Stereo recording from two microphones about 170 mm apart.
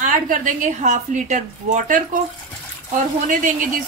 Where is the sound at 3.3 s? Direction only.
50° right (ahead or behind).